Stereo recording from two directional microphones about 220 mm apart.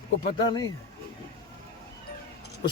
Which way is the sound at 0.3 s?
20° left (ahead or behind).